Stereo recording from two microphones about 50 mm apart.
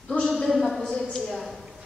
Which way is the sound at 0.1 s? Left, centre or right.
Centre.